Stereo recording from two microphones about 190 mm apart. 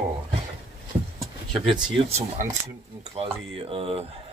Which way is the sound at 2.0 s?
35° right (ahead or behind).